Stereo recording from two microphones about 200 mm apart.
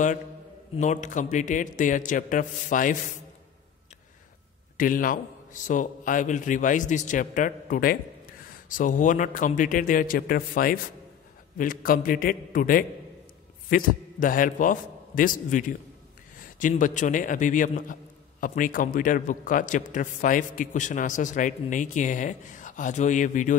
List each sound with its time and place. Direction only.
0.7 s a man's voice: 35° left (ahead or behind)
4.7 s a man's voice: 45° left (ahead or behind)